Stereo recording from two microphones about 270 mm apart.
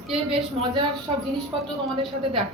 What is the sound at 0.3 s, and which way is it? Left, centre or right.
Speech, centre.